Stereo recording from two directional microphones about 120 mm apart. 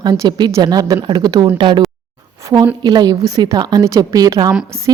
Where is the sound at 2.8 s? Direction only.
35° right (ahead or behind).